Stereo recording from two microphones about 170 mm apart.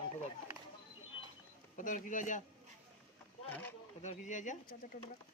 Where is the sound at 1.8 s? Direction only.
50° left (ahead or behind).